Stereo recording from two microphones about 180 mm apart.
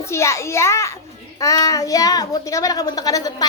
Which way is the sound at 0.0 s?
15° left (ahead or behind).